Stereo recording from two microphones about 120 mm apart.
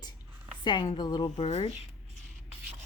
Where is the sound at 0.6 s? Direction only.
40° left (ahead or behind).